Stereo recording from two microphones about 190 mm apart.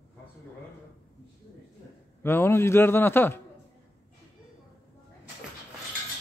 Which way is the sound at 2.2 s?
10° left (ahead or behind).